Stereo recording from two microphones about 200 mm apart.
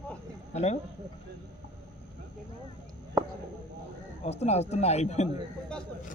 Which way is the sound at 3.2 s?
10° right (ahead or behind).